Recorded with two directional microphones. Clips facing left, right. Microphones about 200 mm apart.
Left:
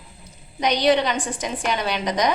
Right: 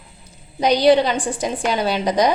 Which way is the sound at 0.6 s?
30° right (ahead or behind).